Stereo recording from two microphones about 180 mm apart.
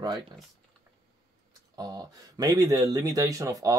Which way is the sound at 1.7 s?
20° right (ahead or behind).